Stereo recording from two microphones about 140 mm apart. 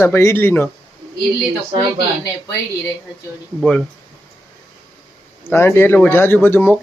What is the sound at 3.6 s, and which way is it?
Speech, 5° left (ahead or behind).